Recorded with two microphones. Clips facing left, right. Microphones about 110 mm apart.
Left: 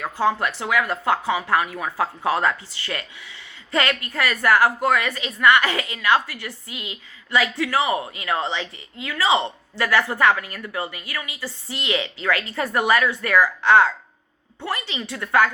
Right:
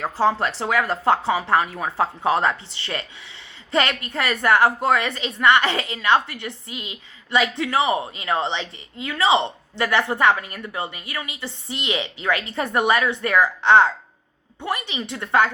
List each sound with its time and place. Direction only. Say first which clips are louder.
0.0 s a woman's voice: right 1 dB; 30° right (ahead or behind)